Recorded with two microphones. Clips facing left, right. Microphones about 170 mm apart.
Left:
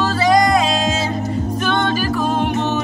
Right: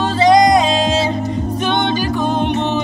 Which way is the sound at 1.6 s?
25° right (ahead or behind).